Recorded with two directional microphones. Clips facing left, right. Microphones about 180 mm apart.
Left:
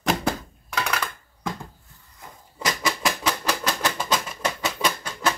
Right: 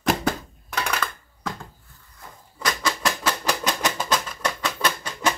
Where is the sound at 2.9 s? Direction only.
5° left (ahead or behind).